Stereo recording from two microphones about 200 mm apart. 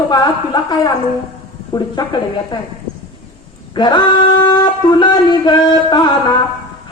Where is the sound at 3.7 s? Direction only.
25° left (ahead or behind).